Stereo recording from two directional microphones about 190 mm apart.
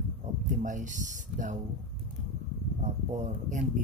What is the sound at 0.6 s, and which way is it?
Speech, 40° right (ahead or behind).